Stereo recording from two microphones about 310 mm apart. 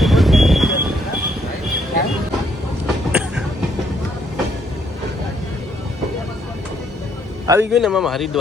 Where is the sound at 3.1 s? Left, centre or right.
Centre.